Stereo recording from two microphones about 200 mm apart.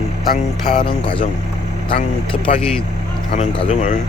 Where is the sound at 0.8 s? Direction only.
25° left (ahead or behind).